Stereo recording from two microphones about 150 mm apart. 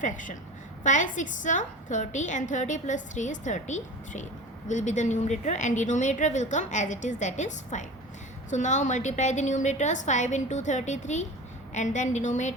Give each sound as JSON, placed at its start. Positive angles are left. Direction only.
{"t": 0.0, "sound": "a woman's voice", "side_deg": 60}